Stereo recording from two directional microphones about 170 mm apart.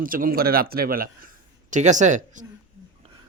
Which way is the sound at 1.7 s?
45° right (ahead or behind).